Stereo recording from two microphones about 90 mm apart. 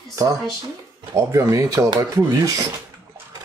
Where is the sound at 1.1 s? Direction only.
35° right (ahead or behind).